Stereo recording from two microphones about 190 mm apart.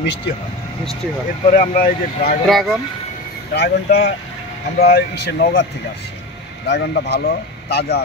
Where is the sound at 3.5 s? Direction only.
60° left (ahead or behind).